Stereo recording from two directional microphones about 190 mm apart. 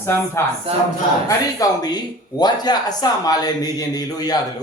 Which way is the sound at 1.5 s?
20° left (ahead or behind).